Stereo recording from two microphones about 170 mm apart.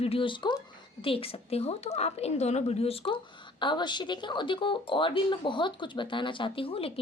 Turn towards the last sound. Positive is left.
turn(degrees=35)  # may be behind; listen again after turning